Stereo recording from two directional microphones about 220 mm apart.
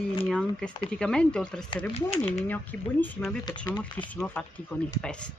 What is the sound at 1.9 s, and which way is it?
Speech, 25° left (ahead or behind).